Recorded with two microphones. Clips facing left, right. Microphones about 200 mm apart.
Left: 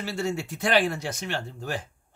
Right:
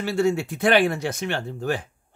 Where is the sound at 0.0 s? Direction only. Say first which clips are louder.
Right 7 dB; 60° right (ahead or behind).